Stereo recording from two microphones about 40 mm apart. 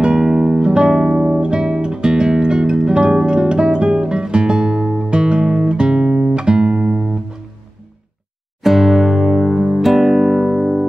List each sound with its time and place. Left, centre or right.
0.0 s music: centre
8.6 s music: centre